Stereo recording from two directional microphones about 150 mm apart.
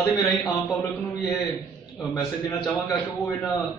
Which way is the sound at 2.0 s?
30° left (ahead or behind).